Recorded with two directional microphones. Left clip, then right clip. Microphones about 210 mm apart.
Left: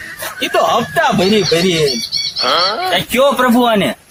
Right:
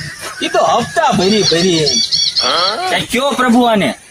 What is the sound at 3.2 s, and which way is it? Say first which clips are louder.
Speech: left 2 dB; 20° left (ahead or behind).